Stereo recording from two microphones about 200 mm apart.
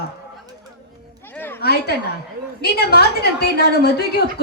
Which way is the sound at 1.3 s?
10° left (ahead or behind).